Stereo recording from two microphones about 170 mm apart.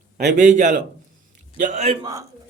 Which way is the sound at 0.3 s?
50° right (ahead or behind).